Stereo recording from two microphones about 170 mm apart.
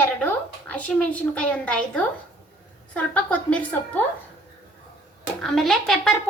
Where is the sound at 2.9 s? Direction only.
10° left (ahead or behind).